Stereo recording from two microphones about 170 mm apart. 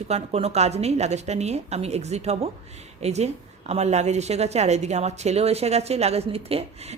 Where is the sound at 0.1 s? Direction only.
40° right (ahead or behind).